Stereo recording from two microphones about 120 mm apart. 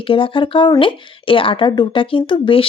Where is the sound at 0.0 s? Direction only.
45° left (ahead or behind).